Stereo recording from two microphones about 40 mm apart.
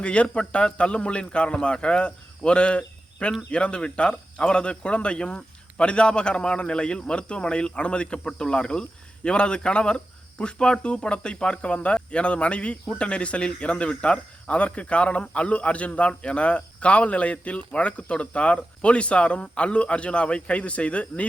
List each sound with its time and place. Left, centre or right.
0.0 s speech: left